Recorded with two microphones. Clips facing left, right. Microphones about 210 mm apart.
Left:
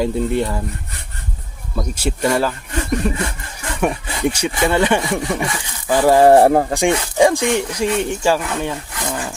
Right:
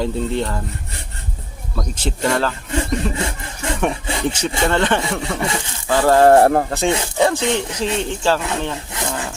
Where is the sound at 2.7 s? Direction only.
25° right (ahead or behind).